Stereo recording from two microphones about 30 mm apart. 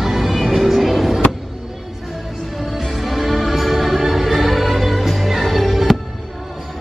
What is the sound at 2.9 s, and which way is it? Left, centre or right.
Music, centre.